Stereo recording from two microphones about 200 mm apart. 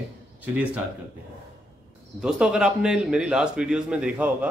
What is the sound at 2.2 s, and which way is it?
A man's voice, 5° right (ahead or behind).